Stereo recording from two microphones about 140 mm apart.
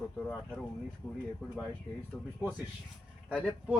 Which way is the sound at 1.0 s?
15° left (ahead or behind).